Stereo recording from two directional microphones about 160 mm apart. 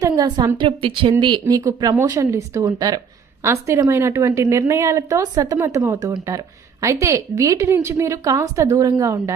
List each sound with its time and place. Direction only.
0.0 s a woman's voice: 25° right (ahead or behind)